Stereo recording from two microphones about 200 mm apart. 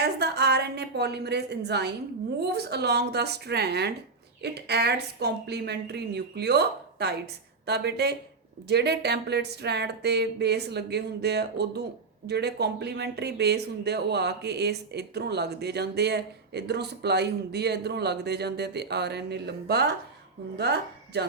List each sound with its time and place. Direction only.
0.0 s a woman's voice: 55° right (ahead or behind)